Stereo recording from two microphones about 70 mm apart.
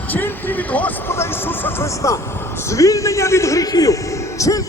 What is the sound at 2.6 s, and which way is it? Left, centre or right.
A man's voice, left.